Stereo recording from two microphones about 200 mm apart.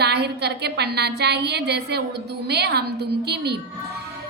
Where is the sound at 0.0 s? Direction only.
55° right (ahead or behind).